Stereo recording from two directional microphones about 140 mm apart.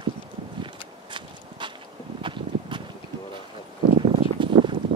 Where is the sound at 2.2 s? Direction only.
35° right (ahead or behind).